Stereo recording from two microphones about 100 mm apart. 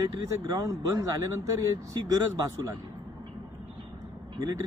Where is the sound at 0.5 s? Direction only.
30° right (ahead or behind).